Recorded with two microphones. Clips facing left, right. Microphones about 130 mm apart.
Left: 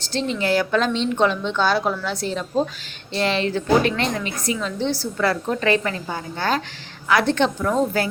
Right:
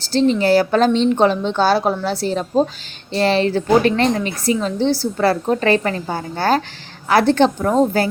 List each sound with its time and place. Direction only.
0.1 s a woman's voice: 35° right (ahead or behind)